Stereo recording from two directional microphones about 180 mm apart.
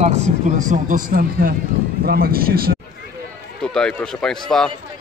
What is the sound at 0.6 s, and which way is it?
A man's voice, 45° right (ahead or behind).